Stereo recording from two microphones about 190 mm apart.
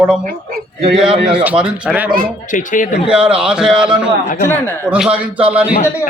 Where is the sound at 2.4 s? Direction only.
45° left (ahead or behind).